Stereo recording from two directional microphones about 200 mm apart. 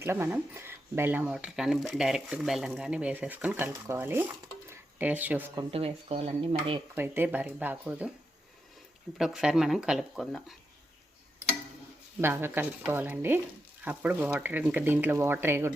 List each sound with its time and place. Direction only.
0.0 s speech: 10° right (ahead or behind)
5.7 s speech: 30° right (ahead or behind)
6.9 s speech: 10° right (ahead or behind)
9.1 s speech: centre (ahead or behind)
12.2 s speech: 10° right (ahead or behind)